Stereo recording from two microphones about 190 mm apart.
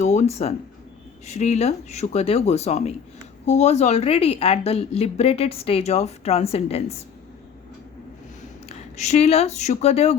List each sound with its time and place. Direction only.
0.0 s a woman's voice: 35° left (ahead or behind)
8.7 s speech: 35° left (ahead or behind)